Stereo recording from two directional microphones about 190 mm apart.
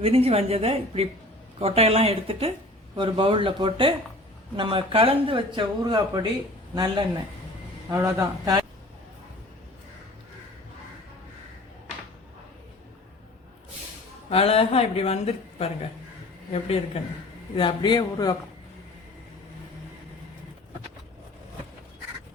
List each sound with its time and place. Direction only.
0.0 s speech: 30° right (ahead or behind)
7.9 s a man's voice: 15° right (ahead or behind)
14.3 s a woman's voice: 30° left (ahead or behind)